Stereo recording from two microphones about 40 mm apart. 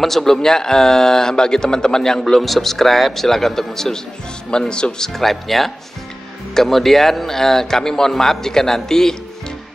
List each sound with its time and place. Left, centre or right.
0.0 s speech: centre
4.5 s speech: left
5.1 s speech: centre